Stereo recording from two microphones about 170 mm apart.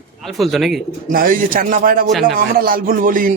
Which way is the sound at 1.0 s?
55° right (ahead or behind).